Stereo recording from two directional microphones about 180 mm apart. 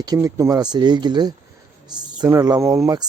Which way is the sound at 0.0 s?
20° right (ahead or behind).